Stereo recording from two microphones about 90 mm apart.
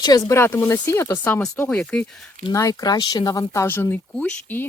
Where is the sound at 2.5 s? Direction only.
40° left (ahead or behind).